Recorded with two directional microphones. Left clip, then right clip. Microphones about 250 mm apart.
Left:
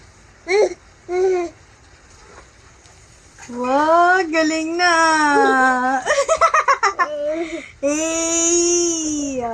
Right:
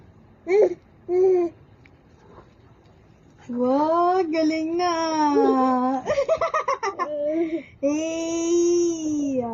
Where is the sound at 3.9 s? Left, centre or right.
Centre.